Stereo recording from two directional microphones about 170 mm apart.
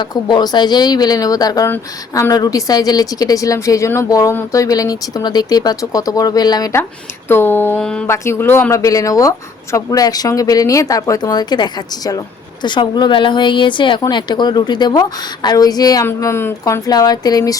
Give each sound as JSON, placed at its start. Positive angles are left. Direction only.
{"t": 0.0, "sound": "a woman's voice", "side_deg": 25}
{"t": 8.1, "sound": "a woman's voice", "side_deg": 15}